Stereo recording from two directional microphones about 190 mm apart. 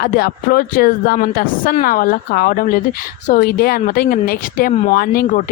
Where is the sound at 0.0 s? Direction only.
50° left (ahead or behind).